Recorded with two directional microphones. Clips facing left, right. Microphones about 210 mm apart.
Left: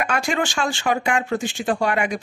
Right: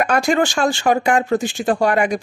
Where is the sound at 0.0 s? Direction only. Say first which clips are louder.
Right 6 dB; 40° right (ahead or behind).